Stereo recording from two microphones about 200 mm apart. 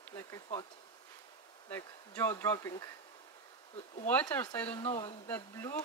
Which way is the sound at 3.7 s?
35° left (ahead or behind).